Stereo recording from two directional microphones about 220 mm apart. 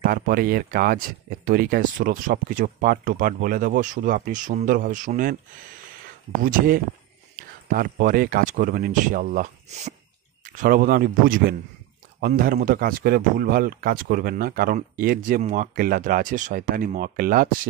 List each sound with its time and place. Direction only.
0.0 s speech: 40° right (ahead or behind)
6.4 s speech: 40° right (ahead or behind)